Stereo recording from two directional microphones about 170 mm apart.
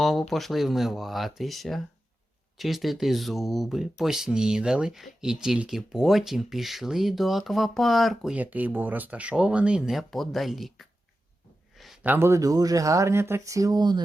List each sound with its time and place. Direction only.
0.0 s speech: centre (ahead or behind); by 14.0 s 25° right (ahead or behind)